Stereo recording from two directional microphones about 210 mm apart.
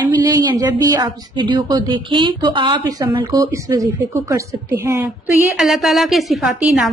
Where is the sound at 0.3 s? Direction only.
15° right (ahead or behind).